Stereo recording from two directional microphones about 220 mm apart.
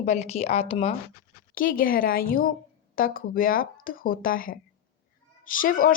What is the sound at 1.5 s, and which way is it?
Speech, 40° left (ahead or behind).